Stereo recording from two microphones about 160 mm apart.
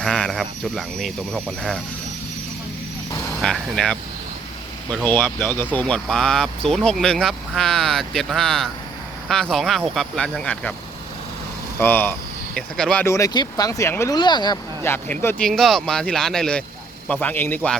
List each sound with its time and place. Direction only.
0.0 s speech: 5° left (ahead or behind)
3.4 s speech: centre (ahead or behind)
5.0 s speech: 10° left (ahead or behind)
11.8 s speech: 10° left (ahead or behind)
13.1 s speech: 25° left (ahead or behind)
15.1 s speech: 10° left (ahead or behind)